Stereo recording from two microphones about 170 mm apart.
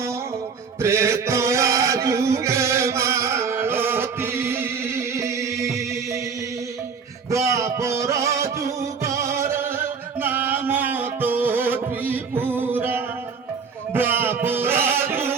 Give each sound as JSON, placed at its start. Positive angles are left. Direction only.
{"t": 0.8, "sound": "chant", "side_deg": -15}
{"t": 7.3, "sound": "music", "side_deg": -20}